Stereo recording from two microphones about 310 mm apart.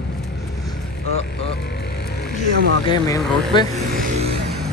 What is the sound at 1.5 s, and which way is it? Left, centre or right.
Vehicle, left.